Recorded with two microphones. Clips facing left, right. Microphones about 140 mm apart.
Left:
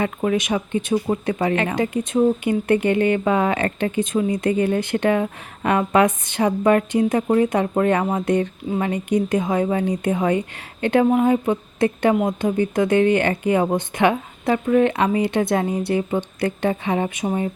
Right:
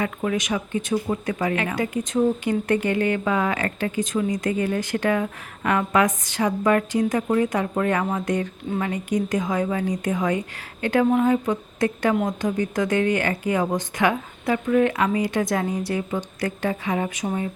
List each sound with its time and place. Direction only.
0.0 s speech: 30° left (ahead or behind)